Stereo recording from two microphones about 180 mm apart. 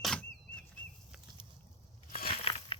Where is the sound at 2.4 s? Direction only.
30° left (ahead or behind).